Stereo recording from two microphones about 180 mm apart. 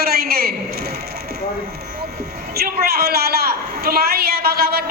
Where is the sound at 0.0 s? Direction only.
60° right (ahead or behind).